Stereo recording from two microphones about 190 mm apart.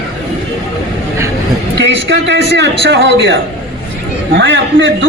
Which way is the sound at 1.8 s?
70° right (ahead or behind).